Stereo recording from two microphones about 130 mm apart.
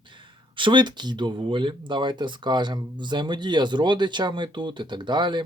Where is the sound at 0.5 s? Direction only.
40° right (ahead or behind).